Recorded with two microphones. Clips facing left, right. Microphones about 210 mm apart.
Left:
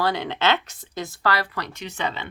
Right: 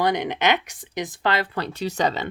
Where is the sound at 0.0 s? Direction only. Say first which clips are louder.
Right 2 dB; 20° right (ahead or behind).